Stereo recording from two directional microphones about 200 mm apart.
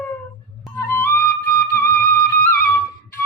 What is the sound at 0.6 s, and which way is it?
Flute, 10° left (ahead or behind).